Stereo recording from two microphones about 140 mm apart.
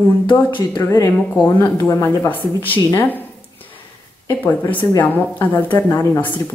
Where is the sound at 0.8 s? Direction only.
20° left (ahead or behind).